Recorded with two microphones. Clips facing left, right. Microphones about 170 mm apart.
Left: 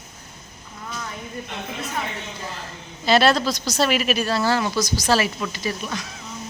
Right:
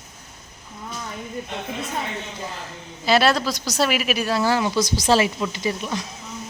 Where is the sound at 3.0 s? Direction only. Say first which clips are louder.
Left 1 dB; 5° right (ahead or behind).